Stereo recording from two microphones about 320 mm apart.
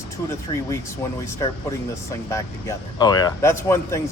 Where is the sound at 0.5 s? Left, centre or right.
Centre.